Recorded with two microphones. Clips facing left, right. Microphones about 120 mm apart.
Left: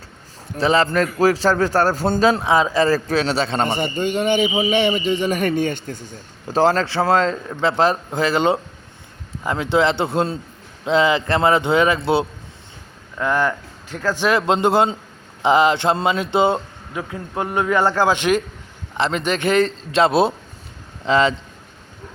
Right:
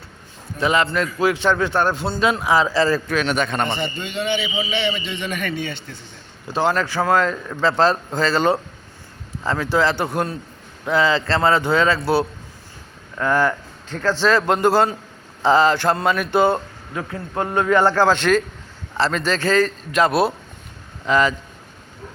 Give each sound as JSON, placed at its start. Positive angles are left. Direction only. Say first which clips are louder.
{"t": 0.6, "sound": "a man's voice", "louder": "left 2 dB", "side_deg": 30}
{"t": 0.9, "sound": "a man's voice", "louder": "left 3 dB", "side_deg": 45}
{"t": 2.9, "sound": "a man's voice", "louder": "left 2 dB", "side_deg": 35}
{"t": 3.7, "sound": "a man's voice", "louder": "left 5 dB", "side_deg": 45}
{"t": 6.5, "sound": "a man's voice", "louder": "left 3 dB", "side_deg": 35}